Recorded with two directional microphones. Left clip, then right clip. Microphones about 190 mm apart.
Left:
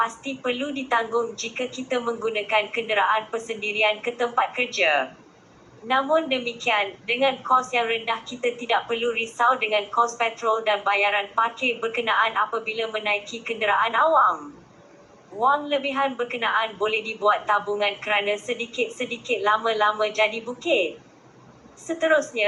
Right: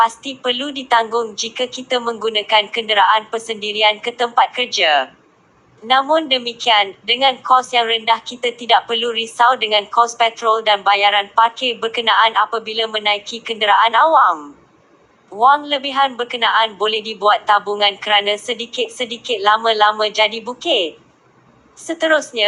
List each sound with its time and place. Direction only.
0.0 s a woman's voice: 30° right (ahead or behind)
15.4 s a woman's voice: 30° right (ahead or behind)